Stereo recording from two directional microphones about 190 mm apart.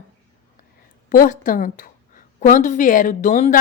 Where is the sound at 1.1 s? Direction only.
45° left (ahead or behind).